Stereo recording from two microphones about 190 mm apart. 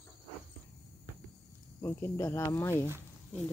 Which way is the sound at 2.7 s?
15° right (ahead or behind).